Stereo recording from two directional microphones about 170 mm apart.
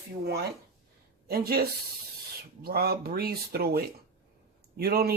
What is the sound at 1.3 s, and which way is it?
Speech, 65° right (ahead or behind).